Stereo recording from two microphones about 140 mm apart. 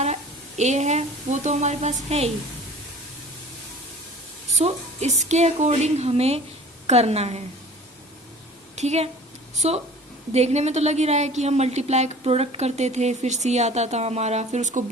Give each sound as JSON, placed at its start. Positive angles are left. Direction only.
{"t": 0.0, "sound": "a woman's voice", "side_deg": -55}
{"t": 4.5, "sound": "a woman's voice", "side_deg": -50}
{"t": 8.7, "sound": "a woman's voice", "side_deg": -55}